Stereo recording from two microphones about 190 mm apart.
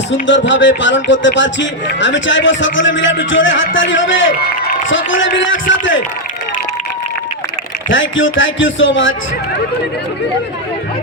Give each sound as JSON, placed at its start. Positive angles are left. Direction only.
{"t": 0.1, "sound": "a man's voice", "side_deg": 75}
{"t": 7.9, "sound": "speech", "side_deg": 85}